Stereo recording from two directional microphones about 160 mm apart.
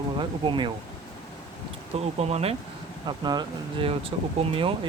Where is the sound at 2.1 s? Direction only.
40° right (ahead or behind).